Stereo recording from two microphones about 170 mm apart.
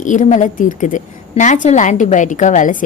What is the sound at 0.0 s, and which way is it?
A woman's voice, 50° left (ahead or behind).